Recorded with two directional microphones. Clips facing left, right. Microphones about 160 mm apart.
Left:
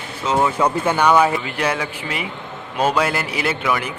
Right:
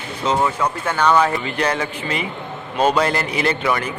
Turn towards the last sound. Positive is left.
turn(degrees=10)  # may be behind; listen again after turning